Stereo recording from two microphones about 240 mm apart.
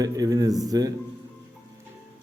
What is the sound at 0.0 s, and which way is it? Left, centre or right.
Speech, centre.